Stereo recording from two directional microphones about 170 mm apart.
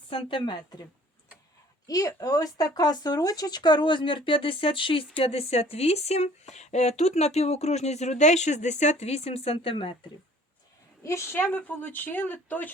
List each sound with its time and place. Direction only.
0.1 s a woman's voice: 30° left (ahead or behind)
1.9 s speech: 20° left (ahead or behind)
11.0 s speech: 15° left (ahead or behind)